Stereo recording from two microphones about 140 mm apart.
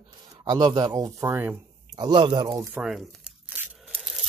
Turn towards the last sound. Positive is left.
turn(degrees=-5)  # may be behind; listen again after turning